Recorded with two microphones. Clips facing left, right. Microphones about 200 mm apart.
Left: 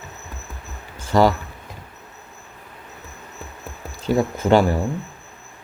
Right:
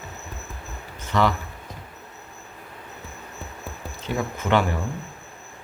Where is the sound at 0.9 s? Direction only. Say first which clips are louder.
Left 6 dB; 40° left (ahead or behind).